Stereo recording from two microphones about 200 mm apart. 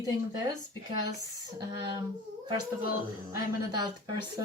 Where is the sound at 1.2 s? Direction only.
20° right (ahead or behind).